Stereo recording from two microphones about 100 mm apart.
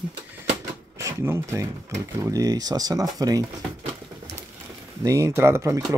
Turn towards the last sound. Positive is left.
turn(degrees=-30)  # may be behind; listen again after turning